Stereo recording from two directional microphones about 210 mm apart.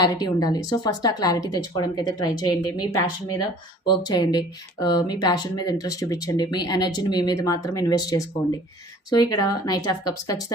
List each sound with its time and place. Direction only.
0.0 s speech: 20° left (ahead or behind)